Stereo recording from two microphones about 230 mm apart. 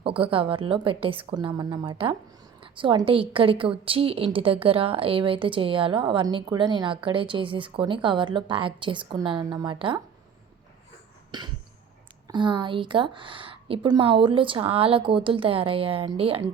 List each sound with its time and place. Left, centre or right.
0.0 s a woman's voice: right
11.3 s cough: centre
12.3 s a woman's voice: right